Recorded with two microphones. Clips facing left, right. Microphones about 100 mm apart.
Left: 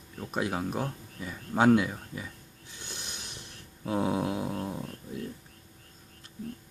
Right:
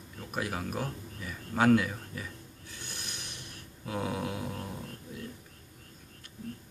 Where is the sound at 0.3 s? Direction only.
25° left (ahead or behind).